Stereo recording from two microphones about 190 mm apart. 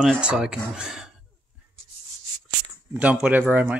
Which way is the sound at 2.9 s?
5° right (ahead or behind).